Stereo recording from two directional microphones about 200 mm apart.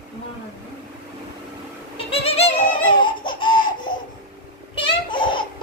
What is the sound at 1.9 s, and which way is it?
Music, 30° left (ahead or behind).